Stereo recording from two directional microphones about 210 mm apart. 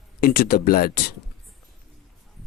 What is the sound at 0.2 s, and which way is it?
Speech, 45° left (ahead or behind).